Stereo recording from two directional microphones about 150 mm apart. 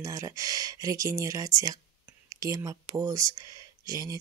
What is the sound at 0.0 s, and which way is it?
Speech, 25° right (ahead or behind).